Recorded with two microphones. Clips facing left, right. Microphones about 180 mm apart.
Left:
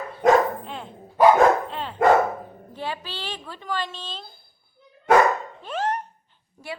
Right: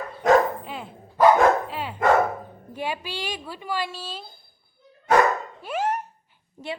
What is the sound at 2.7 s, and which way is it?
A woman's voice, 15° right (ahead or behind).